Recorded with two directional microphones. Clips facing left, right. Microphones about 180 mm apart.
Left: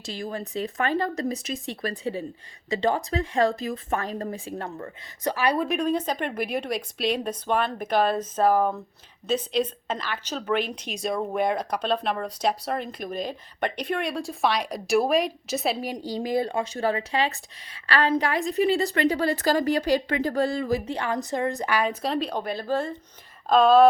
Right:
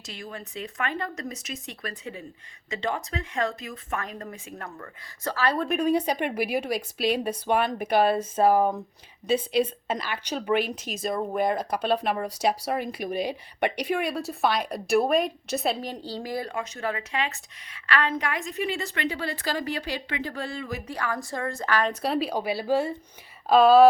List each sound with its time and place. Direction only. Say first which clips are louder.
0.0 s a woman's voice: left 6 dB; 35° left (ahead or behind); by 5.6 s 15° left (ahead or behind)
5.6 s a woman's voice: right 1 dB; 5° right (ahead or behind); by 21.9 s 10° left (ahead or behind)
22.0 s speech: right 1 dB; 5° right (ahead or behind)